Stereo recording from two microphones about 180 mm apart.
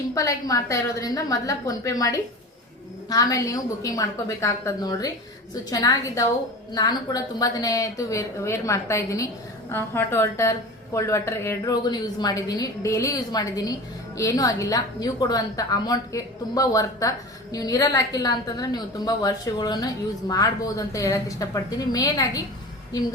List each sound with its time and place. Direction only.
0.1 s a woman's voice: 20° left (ahead or behind)